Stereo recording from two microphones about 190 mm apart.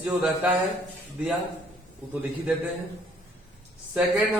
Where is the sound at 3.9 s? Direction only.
5° right (ahead or behind).